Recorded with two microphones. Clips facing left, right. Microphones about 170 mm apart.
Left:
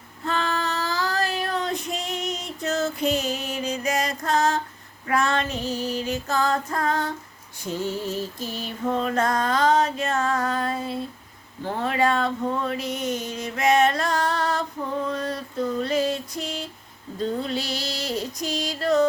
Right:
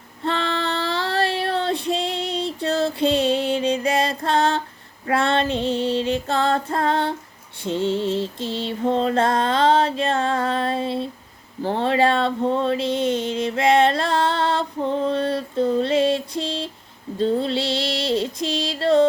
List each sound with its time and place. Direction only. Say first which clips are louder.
0.3 s child singing: right 2 dB; 30° right (ahead or behind)
5.0 s mantra: right 3 dB; 30° right (ahead or behind)
11.6 s a sound: right 4 dB; 30° right (ahead or behind)
17.2 s female singing: right 6 dB; 30° right (ahead or behind)